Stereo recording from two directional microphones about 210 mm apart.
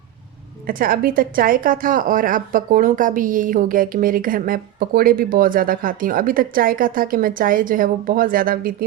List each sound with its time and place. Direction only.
0.7 s a woman's voice: 45° right (ahead or behind)